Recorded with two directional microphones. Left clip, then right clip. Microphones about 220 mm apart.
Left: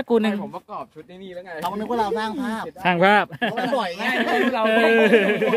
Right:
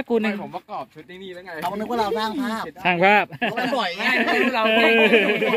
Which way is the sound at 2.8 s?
5° left (ahead or behind).